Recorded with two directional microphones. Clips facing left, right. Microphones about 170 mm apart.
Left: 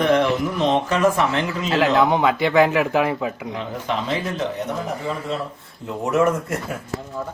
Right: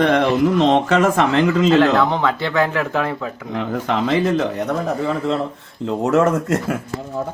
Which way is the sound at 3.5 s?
65° right (ahead or behind).